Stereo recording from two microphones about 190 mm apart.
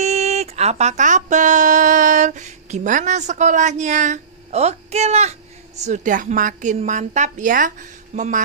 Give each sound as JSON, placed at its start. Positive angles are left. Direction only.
{"t": 0.0, "sound": "speech", "side_deg": -35}